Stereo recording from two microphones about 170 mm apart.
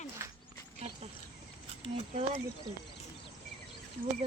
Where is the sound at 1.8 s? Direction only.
35° right (ahead or behind).